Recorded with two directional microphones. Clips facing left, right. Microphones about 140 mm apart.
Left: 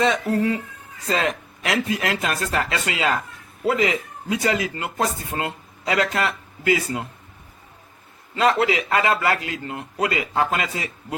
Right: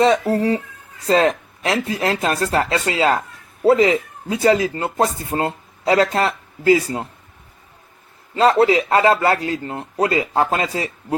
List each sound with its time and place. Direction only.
0.0 s speech: 35° right (ahead or behind)
8.4 s speech: 35° right (ahead or behind)